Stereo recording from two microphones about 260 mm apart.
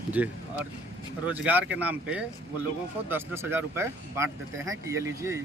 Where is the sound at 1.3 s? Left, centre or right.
Centre.